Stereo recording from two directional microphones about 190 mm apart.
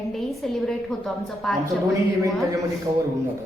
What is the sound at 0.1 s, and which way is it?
A woman's voice, centre (ahead or behind).